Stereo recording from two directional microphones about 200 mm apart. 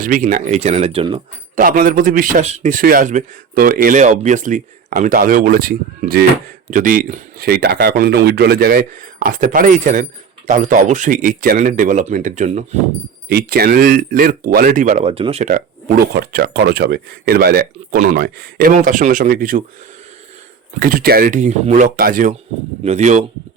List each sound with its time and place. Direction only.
0.0 s speech: 40° right (ahead or behind)
1.5 s speech: 45° right (ahead or behind)
13.2 s speech: 50° right (ahead or behind)
20.7 s speech: 45° right (ahead or behind)